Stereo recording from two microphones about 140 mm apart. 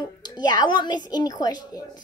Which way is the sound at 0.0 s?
30° left (ahead or behind).